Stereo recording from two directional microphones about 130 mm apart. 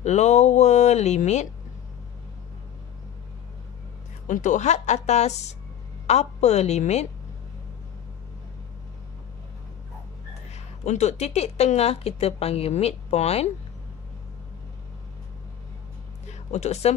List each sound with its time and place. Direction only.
0.0 s a woman's voice: 60° left (ahead or behind)
4.3 s a woman's voice: 75° left (ahead or behind)
10.5 s a woman's voice: 60° left (ahead or behind)
16.3 s a sound: 60° left (ahead or behind)